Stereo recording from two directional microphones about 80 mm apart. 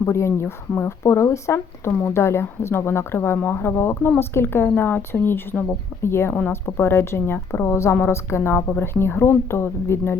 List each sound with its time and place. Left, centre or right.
0.0 s speech: left